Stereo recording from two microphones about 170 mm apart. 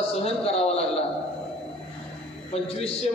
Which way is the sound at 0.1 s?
35° left (ahead or behind).